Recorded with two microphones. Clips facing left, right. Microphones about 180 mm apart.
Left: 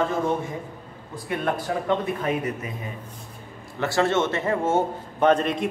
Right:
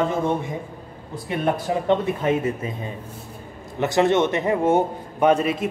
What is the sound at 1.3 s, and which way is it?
A man's voice, 20° right (ahead or behind).